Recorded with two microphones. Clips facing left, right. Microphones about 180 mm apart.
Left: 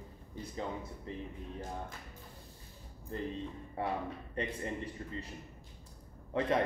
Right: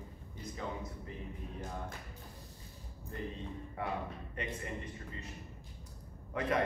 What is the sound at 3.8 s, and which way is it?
Speech, 30° left (ahead or behind).